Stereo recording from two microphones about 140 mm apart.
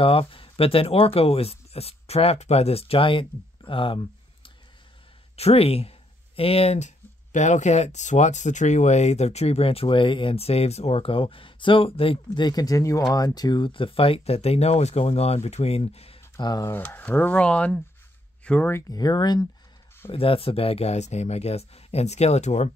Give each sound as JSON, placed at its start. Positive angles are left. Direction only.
{"t": 0.0, "sound": "speech", "side_deg": 40}
{"t": 5.3, "sound": "speech", "side_deg": 45}
{"t": 7.3, "sound": "speech", "side_deg": 60}
{"t": 16.3, "sound": "speech", "side_deg": 30}
{"t": 16.7, "sound": "speech", "side_deg": 15}
{"t": 20.1, "sound": "speech", "side_deg": 40}